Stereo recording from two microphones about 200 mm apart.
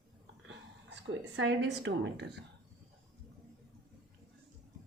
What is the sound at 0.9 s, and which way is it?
Speech, 60° right (ahead or behind).